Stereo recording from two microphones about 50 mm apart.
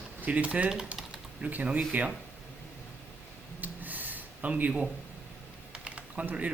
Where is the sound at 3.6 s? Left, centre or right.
Right.